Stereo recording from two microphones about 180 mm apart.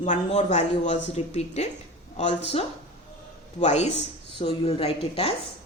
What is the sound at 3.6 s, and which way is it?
Speech, 40° left (ahead or behind).